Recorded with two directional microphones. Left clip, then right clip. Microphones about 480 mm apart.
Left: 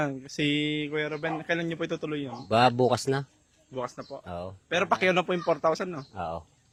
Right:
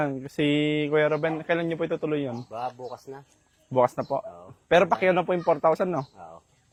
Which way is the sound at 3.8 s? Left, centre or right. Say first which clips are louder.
Right 13 dB; right.